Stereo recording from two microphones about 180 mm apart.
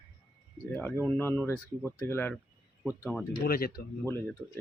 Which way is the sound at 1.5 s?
15° right (ahead or behind).